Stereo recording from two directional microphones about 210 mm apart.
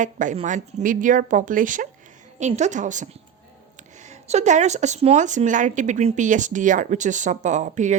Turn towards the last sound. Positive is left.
turn(degrees=-35)  # may be behind; listen again after turning